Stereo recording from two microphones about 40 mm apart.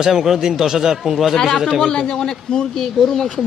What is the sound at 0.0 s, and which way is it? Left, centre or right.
Speech, centre.